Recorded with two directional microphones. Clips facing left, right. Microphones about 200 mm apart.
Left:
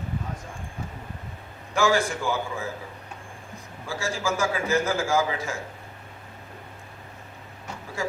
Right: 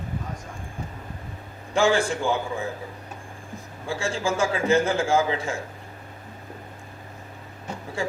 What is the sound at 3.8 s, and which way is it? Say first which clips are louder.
A man's voice: right 2 dB; 30° right (ahead or behind).